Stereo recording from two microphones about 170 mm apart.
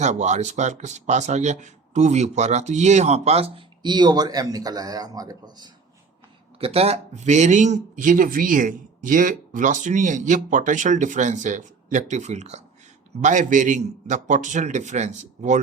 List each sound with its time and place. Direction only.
0.0 s speech: 45° right (ahead or behind); by 5.7 s 25° right (ahead or behind)
6.6 s speech: 35° right (ahead or behind)